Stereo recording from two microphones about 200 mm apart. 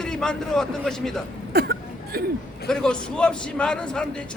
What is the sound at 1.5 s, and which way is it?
Hiccup, 50° right (ahead or behind).